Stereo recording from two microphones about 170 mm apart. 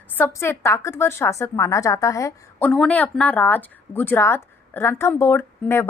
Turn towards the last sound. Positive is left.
turn(degrees=15)  # may be behind; listen again after turning